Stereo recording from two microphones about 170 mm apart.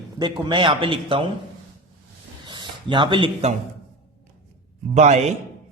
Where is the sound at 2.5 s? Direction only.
25° right (ahead or behind).